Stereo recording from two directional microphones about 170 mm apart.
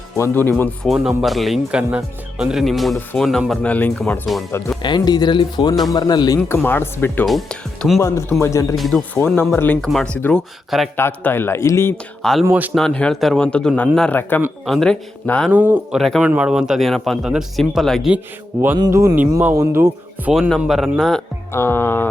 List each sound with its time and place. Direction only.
0.2 s speech: 10° left (ahead or behind)
0.9 s speech: centre (ahead or behind)
4.8 s speech: 25° left (ahead or behind); by 7.9 s centre (ahead or behind)
7.9 s speech: 15° left (ahead or behind)
8.7 s speech: centre (ahead or behind)
9.1 s speech: 10° left (ahead or behind)
12.2 s speech: centre (ahead or behind)
12.5 s speech: 10° right (ahead or behind)
12.7 s speech: 5° left (ahead or behind)
15.5 s speech: 10° right (ahead or behind)
16.0 s speech: centre (ahead or behind)
18.8 s speech: 15° right (ahead or behind); by 21.2 s centre (ahead or behind)
21.5 s speech: 15° left (ahead or behind)